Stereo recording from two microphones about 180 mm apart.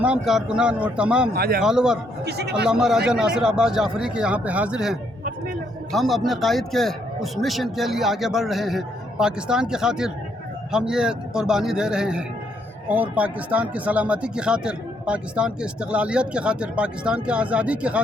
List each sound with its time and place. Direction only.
0.0 s speech: 5° right (ahead or behind)
1.3 s speech: 55° right (ahead or behind)
1.6 s speech: 5° right (ahead or behind)
2.2 s speech: 65° right (ahead or behind)
2.6 s speech: 5° right (ahead or behind)